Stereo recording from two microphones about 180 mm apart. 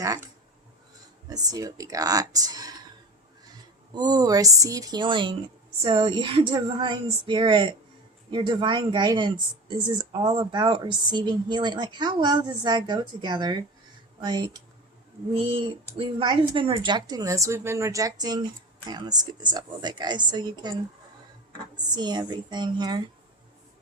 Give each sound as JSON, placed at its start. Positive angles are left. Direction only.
{"t": 0.0, "sound": "speech", "side_deg": -20}
{"t": 1.5, "sound": "speech", "side_deg": -20}
{"t": 3.9, "sound": "speech", "side_deg": -20}
{"t": 21.8, "sound": "speech", "side_deg": -25}